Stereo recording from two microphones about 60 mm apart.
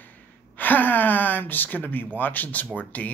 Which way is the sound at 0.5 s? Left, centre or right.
Left.